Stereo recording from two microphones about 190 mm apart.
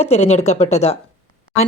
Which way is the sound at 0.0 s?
35° left (ahead or behind).